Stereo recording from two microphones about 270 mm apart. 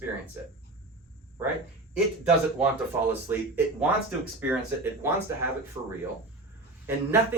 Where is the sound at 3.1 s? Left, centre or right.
Centre.